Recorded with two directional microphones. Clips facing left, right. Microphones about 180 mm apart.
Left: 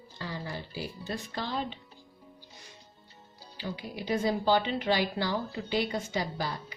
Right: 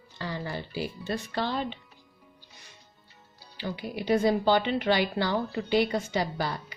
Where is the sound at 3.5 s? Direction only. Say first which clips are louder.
Right 4 dB; 65° right (ahead or behind).